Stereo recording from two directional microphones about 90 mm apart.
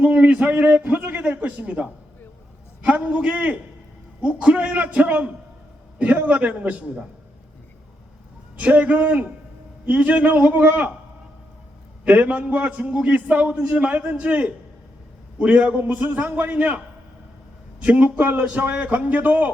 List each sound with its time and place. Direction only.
0.0 s a man's voice: 15° right (ahead or behind)
8.5 s a man's voice: 15° right (ahead or behind)
12.0 s a man's voice: 15° right (ahead or behind)